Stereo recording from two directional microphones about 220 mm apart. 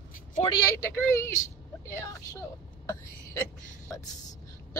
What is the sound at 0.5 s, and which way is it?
Speech, 15° left (ahead or behind).